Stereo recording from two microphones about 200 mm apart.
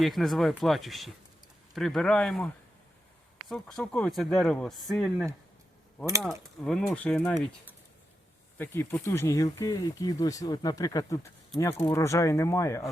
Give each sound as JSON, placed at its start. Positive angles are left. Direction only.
{"t": 0.0, "sound": "speech", "side_deg": 0}
{"t": 3.5, "sound": "speech", "side_deg": 0}
{"t": 6.7, "sound": "speech", "side_deg": 5}
{"t": 8.5, "sound": "speech", "side_deg": 10}